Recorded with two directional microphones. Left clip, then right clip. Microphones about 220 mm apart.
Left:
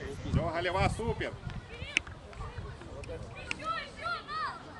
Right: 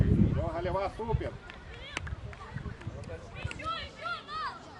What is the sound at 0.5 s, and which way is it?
Speech, 20° left (ahead or behind).